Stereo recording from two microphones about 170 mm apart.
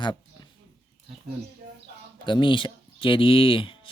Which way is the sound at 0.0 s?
25° left (ahead or behind).